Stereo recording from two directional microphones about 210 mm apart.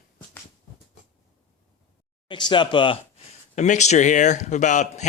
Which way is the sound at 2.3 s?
20° left (ahead or behind).